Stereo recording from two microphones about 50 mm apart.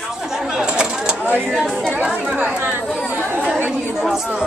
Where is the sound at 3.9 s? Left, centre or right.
Centre.